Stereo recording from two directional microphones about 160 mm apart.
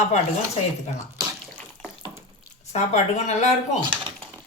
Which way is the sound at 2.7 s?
45° left (ahead or behind).